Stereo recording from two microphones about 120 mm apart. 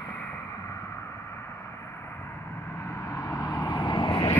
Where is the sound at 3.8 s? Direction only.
45° left (ahead or behind).